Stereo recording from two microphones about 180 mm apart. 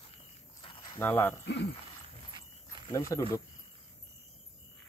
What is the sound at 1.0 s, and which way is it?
Speech, 10° left (ahead or behind).